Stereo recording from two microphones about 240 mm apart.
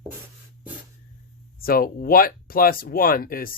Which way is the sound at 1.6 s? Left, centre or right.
Left.